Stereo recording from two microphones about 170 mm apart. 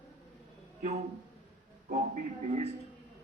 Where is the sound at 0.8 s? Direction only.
40° right (ahead or behind).